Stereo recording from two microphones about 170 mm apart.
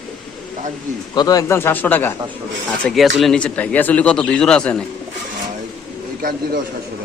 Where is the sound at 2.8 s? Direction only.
Centre (ahead or behind).